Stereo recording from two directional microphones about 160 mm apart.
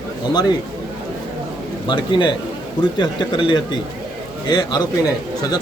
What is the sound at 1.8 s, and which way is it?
Speech, 30° left (ahead or behind).